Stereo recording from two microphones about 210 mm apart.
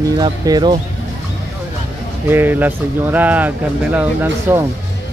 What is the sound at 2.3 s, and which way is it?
Speech, 10° right (ahead or behind).